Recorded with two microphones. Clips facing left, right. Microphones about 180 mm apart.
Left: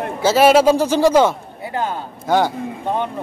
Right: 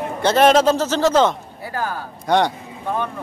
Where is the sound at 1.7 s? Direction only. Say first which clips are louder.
Left 3 dB; 20° left (ahead or behind).